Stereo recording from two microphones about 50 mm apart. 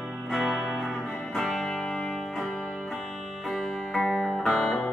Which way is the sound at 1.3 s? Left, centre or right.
Centre.